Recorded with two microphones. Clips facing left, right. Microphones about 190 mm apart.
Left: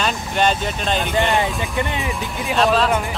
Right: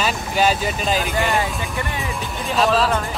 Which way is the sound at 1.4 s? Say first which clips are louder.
Left 3 dB; 20° left (ahead or behind).